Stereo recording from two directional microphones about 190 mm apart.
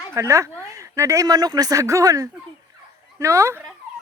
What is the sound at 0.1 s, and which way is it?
Speech, 15° right (ahead or behind).